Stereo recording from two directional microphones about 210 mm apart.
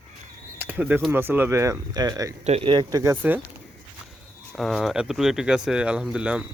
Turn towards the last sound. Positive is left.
turn(degrees=-5)  # may be behind; listen again after turning